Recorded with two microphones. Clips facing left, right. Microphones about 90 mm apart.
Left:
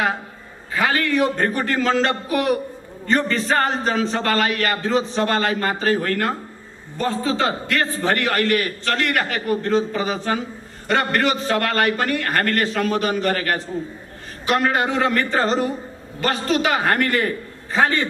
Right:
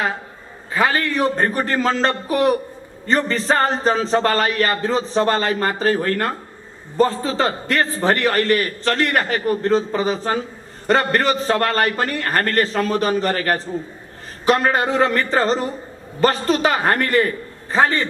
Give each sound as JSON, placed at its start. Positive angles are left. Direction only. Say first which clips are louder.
{"t": 0.7, "sound": "a man's voice", "louder": "right 1 dB", "side_deg": -35}